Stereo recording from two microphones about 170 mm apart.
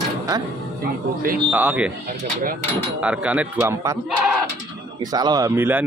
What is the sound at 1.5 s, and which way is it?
Speech, 10° right (ahead or behind).